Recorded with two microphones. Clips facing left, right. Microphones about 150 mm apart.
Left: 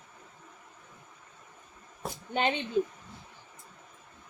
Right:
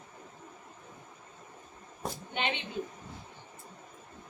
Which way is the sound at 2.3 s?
40° left (ahead or behind).